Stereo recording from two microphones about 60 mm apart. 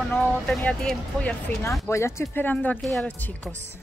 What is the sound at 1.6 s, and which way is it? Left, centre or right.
Speech, left.